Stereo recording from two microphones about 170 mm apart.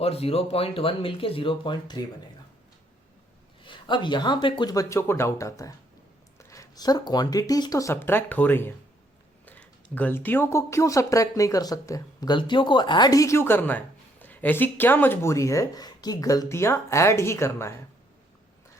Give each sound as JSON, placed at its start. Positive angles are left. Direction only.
{"t": 0.0, "sound": "speech", "side_deg": 35}
{"t": 3.6, "sound": "speech", "side_deg": 30}